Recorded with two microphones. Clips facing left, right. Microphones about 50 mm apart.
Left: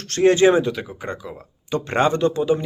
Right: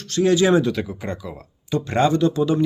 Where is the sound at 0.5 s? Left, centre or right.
Centre; by 2.4 s left.